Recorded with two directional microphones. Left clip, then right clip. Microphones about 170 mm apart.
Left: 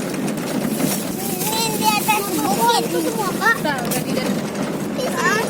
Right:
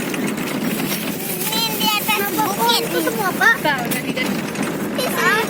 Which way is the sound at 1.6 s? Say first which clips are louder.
Even; 55° left (ahead or behind).